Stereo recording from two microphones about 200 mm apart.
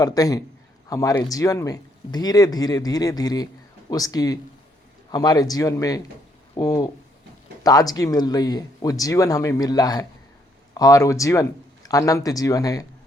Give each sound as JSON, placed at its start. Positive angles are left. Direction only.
{"t": 0.0, "sound": "speech", "side_deg": 20}